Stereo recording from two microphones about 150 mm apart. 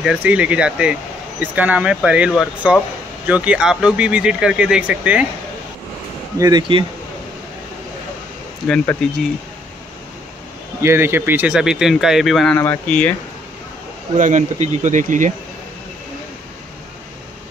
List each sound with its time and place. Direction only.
0.0 s speech: 5° right (ahead or behind)
6.3 s speech: 20° right (ahead or behind)
8.6 s speech: 5° left (ahead or behind)
10.8 s speech: 15° right (ahead or behind); by 13.1 s 10° left (ahead or behind)
14.1 s speech: 55° right (ahead or behind)